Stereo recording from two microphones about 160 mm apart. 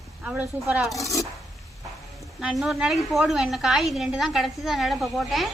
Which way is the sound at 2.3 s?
5° right (ahead or behind).